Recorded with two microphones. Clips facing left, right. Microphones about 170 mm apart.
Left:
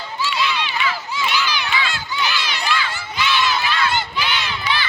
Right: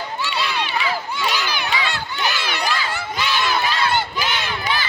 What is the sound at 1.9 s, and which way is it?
Crowd, 60° right (ahead or behind).